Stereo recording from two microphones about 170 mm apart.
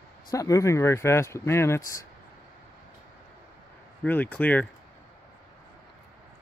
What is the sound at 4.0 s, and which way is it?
Speech, 10° left (ahead or behind).